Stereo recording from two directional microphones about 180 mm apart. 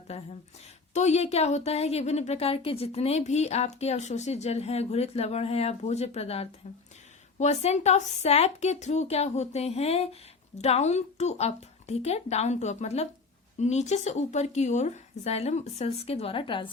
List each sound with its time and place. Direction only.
0.1 s a woman's voice: 35° left (ahead or behind)